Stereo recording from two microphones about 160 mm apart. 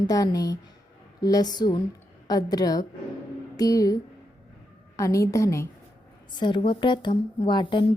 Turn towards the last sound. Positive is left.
turn(degrees=30)  # may be behind; listen again after turning